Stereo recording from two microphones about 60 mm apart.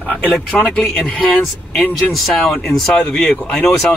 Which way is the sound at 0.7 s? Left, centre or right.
Centre.